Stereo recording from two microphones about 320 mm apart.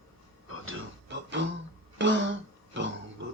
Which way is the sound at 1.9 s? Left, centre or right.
Right.